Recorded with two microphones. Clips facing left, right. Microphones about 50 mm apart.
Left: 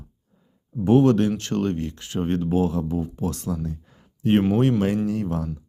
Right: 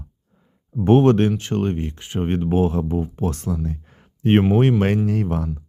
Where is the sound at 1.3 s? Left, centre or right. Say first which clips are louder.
Right 2 dB; centre.